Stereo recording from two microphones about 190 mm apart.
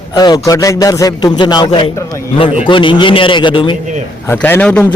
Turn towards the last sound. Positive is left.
turn(degrees=5)  # may be behind; listen again after turning